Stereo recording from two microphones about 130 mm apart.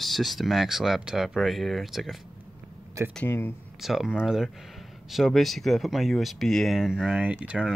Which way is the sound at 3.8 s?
Centre (ahead or behind).